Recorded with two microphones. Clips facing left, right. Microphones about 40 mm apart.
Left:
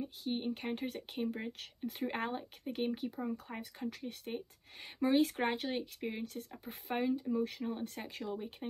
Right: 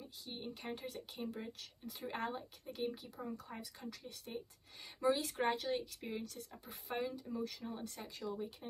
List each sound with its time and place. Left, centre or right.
0.0 s speech: left
7.0 s speech: left